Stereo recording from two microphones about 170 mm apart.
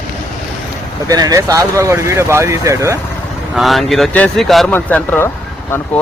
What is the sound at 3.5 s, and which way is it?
Speech, centre (ahead or behind).